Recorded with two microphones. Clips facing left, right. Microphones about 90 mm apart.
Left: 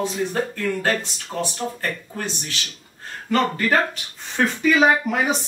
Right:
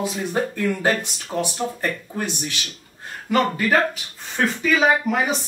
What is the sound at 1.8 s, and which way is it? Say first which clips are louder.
Speech: right 2 dB; 15° right (ahead or behind).